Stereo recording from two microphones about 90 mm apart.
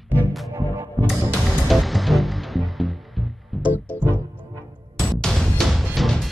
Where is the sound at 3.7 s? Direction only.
20° left (ahead or behind).